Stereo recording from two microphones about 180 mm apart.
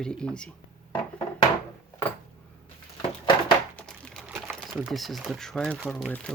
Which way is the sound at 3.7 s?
5° left (ahead or behind).